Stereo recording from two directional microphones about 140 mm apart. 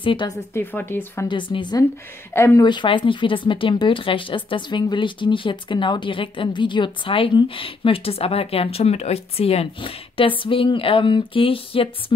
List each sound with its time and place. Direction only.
0.0 s speech: 40° left (ahead or behind)
0.6 s speech: 15° left (ahead or behind)
1.3 s speech: 35° left (ahead or behind)
2.3 s speech: 20° left (ahead or behind)
2.6 s speech: 35° left (ahead or behind)